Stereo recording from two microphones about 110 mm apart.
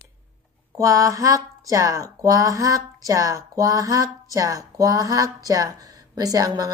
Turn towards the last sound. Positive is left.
turn(degrees=-35)  # may be behind; listen again after turning